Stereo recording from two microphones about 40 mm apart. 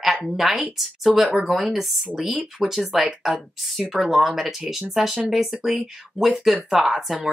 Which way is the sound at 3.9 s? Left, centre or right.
Centre.